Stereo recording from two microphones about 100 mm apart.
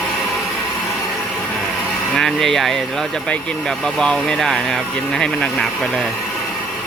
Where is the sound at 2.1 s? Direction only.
5° left (ahead or behind).